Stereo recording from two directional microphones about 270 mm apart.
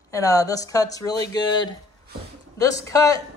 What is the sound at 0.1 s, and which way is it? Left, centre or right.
Speech, centre.